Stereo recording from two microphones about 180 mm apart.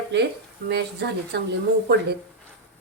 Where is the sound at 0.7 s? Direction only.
65° right (ahead or behind).